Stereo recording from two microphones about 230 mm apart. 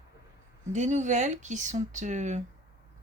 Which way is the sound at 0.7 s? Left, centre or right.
Right.